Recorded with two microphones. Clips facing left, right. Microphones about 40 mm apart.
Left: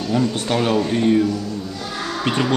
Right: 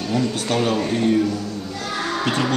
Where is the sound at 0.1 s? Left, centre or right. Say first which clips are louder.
Left 2 dB; centre.